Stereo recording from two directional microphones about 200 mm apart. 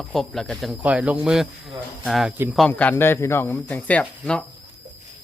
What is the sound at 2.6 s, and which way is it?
Speech, 5° left (ahead or behind).